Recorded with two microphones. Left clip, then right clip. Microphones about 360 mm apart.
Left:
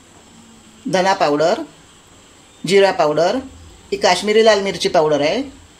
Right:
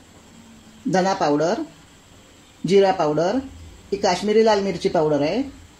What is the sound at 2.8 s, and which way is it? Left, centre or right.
Speech, left.